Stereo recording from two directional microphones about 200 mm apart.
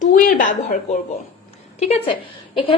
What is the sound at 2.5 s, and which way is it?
Speech, 25° left (ahead or behind).